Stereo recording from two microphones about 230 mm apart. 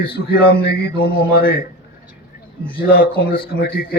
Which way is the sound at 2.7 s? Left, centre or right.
Left.